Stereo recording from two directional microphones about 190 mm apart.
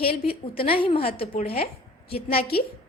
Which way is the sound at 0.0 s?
30° left (ahead or behind).